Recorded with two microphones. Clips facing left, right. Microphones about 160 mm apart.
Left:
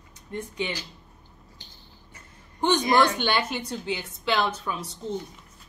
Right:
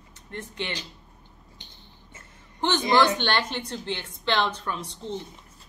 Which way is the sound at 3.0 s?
10° left (ahead or behind).